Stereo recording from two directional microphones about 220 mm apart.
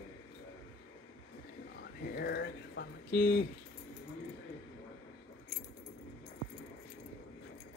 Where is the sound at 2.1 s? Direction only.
50° left (ahead or behind).